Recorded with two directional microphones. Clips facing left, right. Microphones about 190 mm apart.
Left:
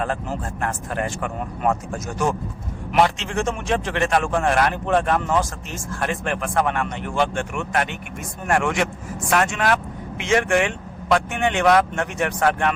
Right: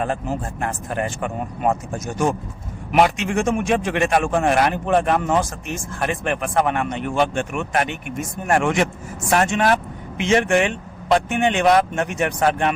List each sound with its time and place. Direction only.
0.6 s speech: 20° right (ahead or behind)
3.2 s a man's voice: 15° right (ahead or behind)